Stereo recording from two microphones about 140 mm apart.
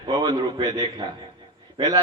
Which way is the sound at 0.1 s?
30° right (ahead or behind).